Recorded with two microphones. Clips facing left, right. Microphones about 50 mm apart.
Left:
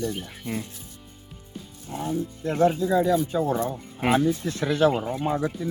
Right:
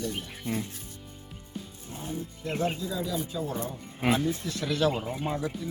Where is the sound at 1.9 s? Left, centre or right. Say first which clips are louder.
Left 8 dB; left.